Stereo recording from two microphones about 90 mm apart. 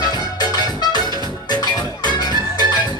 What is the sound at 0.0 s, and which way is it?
Music, 50° left (ahead or behind).